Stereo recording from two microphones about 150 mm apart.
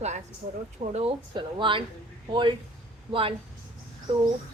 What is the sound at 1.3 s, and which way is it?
Speech, 35° right (ahead or behind).